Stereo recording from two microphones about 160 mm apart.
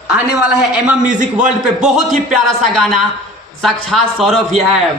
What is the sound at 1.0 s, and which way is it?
Speech, 50° right (ahead or behind).